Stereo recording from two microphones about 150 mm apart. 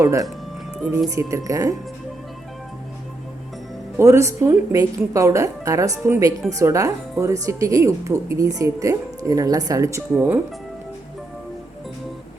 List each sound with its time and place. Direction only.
0.0 s speech: 20° right (ahead or behind)
0.8 s speech: 5° right (ahead or behind)
1.1 s speech: 20° right (ahead or behind)
3.9 s speech: 20° right (ahead or behind)